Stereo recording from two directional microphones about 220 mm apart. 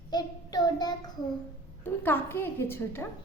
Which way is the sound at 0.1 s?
20° left (ahead or behind).